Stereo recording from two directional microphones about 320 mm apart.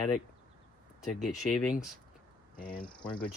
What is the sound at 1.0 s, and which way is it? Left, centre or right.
Speech, centre.